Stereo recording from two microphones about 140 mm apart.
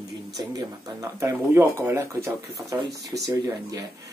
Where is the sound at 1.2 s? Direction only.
15° right (ahead or behind).